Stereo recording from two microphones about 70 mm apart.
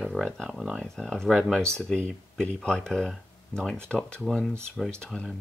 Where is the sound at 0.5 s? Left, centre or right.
Centre.